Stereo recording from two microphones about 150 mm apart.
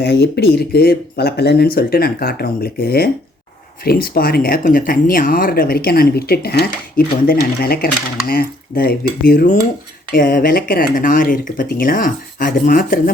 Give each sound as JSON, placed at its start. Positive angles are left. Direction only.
{"t": 0.0, "sound": "speech", "side_deg": 90}
{"t": 3.8, "sound": "speech", "side_deg": 80}
{"t": 8.3, "sound": "speech", "side_deg": 80}